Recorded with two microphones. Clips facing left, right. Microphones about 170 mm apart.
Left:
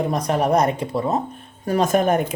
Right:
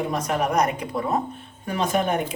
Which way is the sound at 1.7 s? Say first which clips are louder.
Left 5 dB; 45° left (ahead or behind).